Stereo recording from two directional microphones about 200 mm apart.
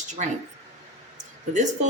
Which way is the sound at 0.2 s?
35° right (ahead or behind).